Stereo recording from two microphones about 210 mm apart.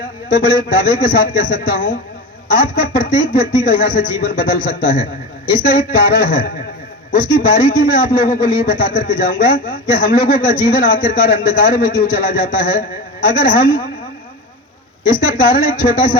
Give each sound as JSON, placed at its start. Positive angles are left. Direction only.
{"t": 0.3, "sound": "a man's voice", "side_deg": 40}
{"t": 15.3, "sound": "speech", "side_deg": 40}